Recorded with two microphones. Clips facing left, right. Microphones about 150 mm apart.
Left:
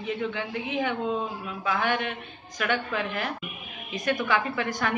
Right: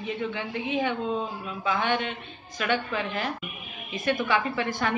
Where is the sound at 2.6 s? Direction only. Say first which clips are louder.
Even; 15° right (ahead or behind).